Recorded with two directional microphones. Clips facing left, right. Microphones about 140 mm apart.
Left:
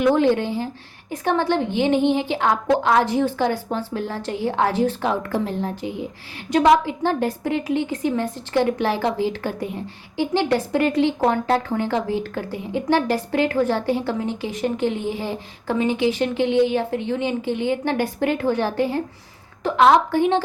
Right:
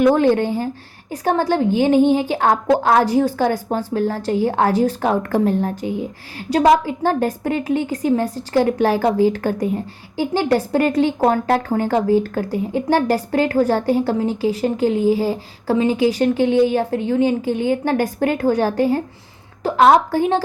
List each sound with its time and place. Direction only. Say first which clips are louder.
0.0 s a woman's voice: right 3 dB; 45° right (ahead or behind)